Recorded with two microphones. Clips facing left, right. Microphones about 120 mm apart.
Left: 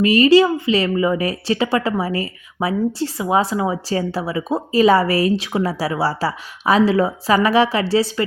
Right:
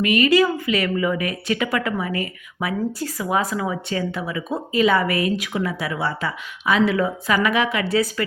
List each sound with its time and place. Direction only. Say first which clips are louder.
0.0 s a woman's voice: left 5 dB; 30° left (ahead or behind)